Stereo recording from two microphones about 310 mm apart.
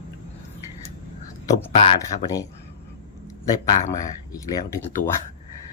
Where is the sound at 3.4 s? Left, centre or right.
Centre.